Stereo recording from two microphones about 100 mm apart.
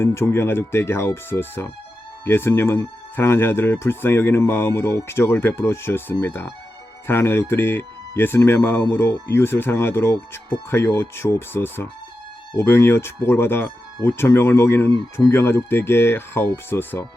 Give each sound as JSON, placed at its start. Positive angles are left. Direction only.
{"t": 0.0, "sound": "speech", "side_deg": 25}